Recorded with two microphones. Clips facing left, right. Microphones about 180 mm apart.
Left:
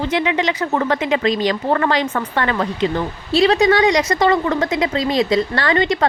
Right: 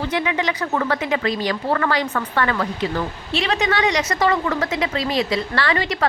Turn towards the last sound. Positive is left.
turn(degrees=35)  # may be behind; listen again after turning